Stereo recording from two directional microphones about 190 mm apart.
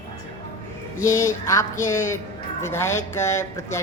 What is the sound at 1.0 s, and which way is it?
Speech, 15° left (ahead or behind).